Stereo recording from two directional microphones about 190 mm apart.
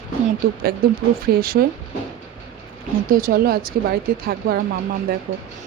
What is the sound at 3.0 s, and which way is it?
A woman's voice, 45° right (ahead or behind).